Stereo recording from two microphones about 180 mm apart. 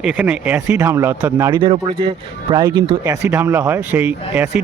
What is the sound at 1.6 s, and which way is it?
A man's voice, 30° right (ahead or behind).